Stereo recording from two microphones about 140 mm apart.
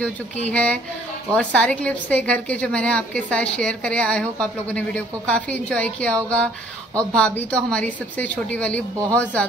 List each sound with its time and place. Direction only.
0.5 s a woman's voice: 10° left (ahead or behind)